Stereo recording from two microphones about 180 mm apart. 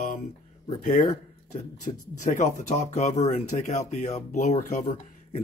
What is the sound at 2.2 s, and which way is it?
Speech, 45° left (ahead or behind).